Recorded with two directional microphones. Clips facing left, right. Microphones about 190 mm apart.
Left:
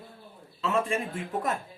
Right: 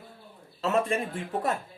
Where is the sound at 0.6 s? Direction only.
35° right (ahead or behind).